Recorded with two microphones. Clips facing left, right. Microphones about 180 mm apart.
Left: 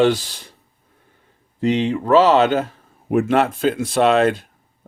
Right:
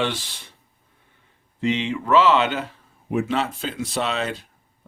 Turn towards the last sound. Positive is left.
turn(degrees=55)  # may be behind; listen again after turning